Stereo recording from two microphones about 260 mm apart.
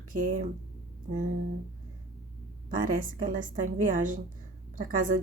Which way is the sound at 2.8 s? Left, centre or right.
Right.